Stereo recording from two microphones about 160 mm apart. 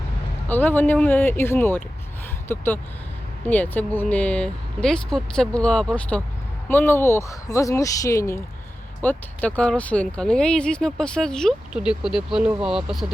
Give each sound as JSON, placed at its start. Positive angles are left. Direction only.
{"t": 0.4, "sound": "speech", "side_deg": 10}